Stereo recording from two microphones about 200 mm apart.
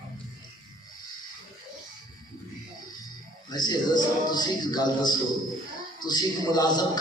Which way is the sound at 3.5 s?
20° left (ahead or behind).